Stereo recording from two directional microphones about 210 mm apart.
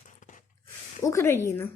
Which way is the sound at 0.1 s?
35° left (ahead or behind).